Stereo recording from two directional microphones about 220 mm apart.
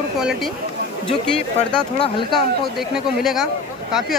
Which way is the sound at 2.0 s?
20° left (ahead or behind).